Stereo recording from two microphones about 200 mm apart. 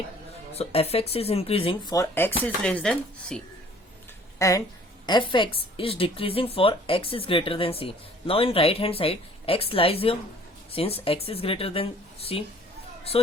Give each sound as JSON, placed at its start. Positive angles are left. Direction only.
{"t": 0.5, "sound": "a woman's voice", "side_deg": 30}
{"t": 2.0, "sound": "speech", "side_deg": 10}
{"t": 4.4, "sound": "a woman's voice", "side_deg": 15}